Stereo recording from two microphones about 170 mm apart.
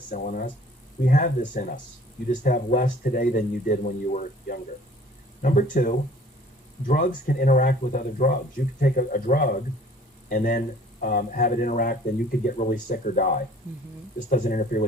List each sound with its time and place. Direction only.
0.1 s speech: 50° left (ahead or behind)